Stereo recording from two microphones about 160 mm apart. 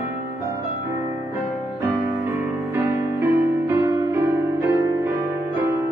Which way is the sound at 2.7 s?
15° right (ahead or behind).